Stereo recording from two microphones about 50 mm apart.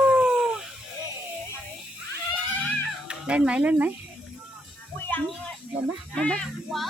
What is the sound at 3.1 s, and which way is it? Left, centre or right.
Speech, right.